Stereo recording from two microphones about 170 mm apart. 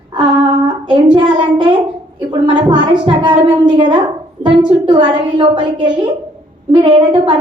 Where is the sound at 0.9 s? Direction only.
30° right (ahead or behind).